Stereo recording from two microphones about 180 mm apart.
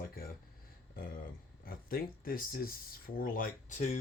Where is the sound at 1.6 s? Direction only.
55° left (ahead or behind).